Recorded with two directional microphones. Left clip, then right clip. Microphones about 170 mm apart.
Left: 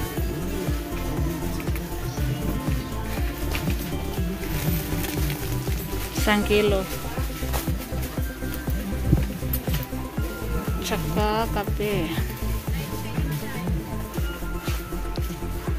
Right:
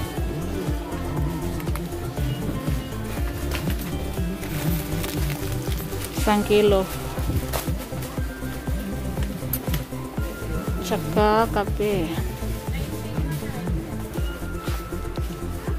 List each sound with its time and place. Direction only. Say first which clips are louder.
6.2 s speech: right 2 dB; 10° right (ahead or behind)
11.1 s speech: right 6 dB; 25° right (ahead or behind)
11.8 s speech: even; 15° right (ahead or behind)